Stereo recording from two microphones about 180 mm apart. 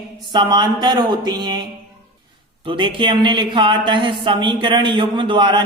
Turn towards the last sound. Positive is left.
turn(degrees=-25)  # may be behind; listen again after turning